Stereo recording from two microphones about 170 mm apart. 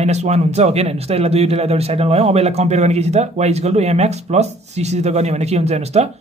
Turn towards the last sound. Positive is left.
turn(degrees=-40)  # may be behind; listen again after turning